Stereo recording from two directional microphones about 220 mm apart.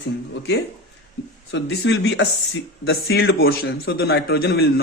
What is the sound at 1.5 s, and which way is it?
Speech, 50° left (ahead or behind).